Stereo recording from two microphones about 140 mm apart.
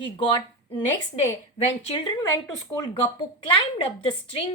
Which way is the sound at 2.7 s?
30° left (ahead or behind).